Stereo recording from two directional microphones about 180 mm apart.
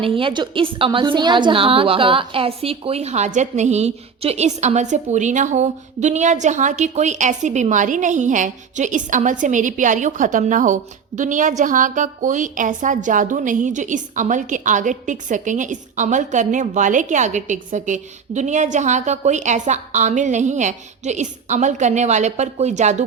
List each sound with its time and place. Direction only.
0.0 s a woman's voice: 30° right (ahead or behind)